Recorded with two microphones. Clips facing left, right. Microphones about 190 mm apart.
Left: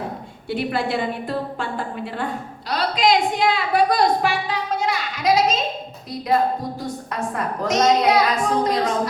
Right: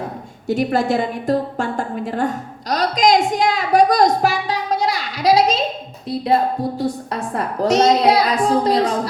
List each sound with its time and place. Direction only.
0.4 s a woman's voice: 45° right (ahead or behind)
6.7 s a woman's voice: 30° right (ahead or behind)